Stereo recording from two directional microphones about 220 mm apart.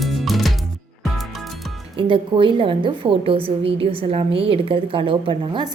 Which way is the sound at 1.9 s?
20° right (ahead or behind).